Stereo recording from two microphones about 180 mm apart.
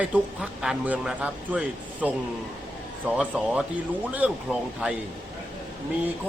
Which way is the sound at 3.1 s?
5° right (ahead or behind).